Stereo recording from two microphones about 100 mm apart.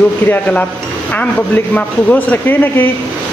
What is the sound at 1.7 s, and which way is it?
Speech, 15° left (ahead or behind).